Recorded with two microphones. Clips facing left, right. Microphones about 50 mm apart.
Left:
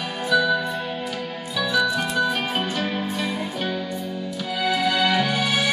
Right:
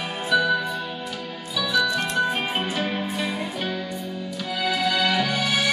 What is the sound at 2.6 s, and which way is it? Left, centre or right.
Music, centre.